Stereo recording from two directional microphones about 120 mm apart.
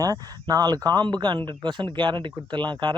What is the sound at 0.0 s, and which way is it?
Speech, 30° right (ahead or behind).